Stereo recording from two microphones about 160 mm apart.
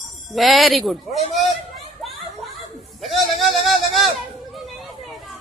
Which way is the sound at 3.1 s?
Centre (ahead or behind).